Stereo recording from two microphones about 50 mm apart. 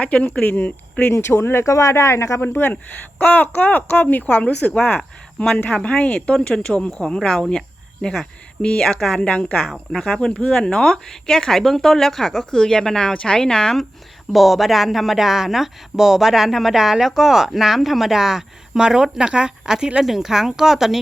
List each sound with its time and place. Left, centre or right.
0.0 s speech: left
1.1 s speech: left
1.6 s speech: left
2.4 s speech: left
3.2 s speech: left; by 7.4 s centre
8.6 s speech: centre
9.2 s speech: centre
9.9 s speech: centre
14.3 s speech: centre